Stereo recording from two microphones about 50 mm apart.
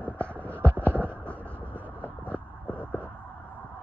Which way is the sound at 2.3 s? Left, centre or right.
Left.